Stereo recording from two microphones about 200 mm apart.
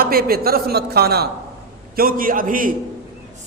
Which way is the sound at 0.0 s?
50° right (ahead or behind).